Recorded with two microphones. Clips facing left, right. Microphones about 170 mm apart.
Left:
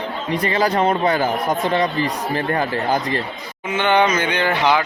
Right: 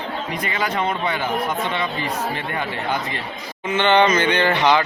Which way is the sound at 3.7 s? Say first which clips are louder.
Right 1 dB; 10° left (ahead or behind).